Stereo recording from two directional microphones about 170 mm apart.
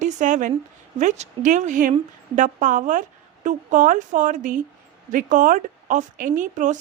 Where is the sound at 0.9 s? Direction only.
45° right (ahead or behind).